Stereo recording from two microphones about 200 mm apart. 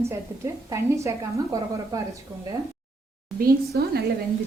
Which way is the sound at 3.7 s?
50° right (ahead or behind).